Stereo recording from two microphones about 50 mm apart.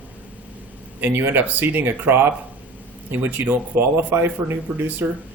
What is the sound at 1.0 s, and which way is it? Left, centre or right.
A man's voice, right.